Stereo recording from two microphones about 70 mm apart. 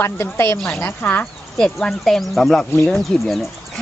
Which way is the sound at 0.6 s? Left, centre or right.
Centre.